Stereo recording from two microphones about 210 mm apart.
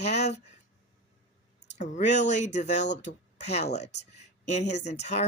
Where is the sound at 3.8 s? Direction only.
55° left (ahead or behind).